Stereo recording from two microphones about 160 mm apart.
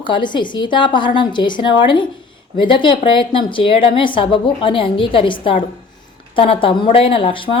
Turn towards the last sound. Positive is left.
turn(degrees=35)  # may be behind; listen again after turning